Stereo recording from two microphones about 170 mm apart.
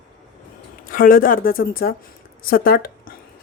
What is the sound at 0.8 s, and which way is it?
Speech, 55° left (ahead or behind).